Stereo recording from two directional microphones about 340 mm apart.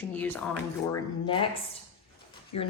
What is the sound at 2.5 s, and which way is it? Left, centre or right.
Speech, left.